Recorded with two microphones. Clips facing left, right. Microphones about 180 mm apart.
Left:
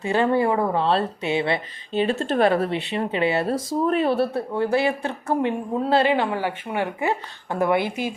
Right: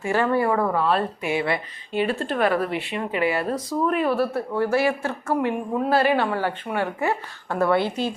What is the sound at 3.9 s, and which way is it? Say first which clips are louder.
Speech: left 2 dB; 25° left (ahead or behind).